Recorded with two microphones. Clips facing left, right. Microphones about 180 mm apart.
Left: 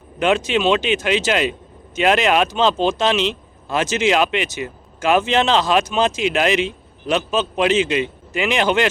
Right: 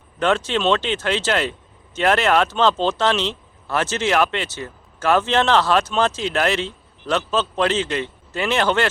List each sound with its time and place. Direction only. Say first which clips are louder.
0.2 s a man's voice: left 2 dB; 15° left (ahead or behind)